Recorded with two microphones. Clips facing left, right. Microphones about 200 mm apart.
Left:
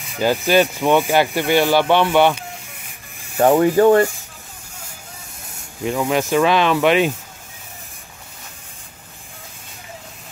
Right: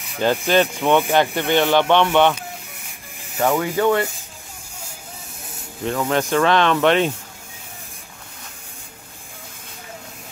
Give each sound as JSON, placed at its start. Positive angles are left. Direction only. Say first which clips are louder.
{"t": 0.0, "sound": "speech", "louder": "left 1 dB", "side_deg": 0}
{"t": 3.5, "sound": "speech", "louder": "left 7 dB", "side_deg": 40}
{"t": 5.9, "sound": "speech", "louder": "left 2 dB", "side_deg": 10}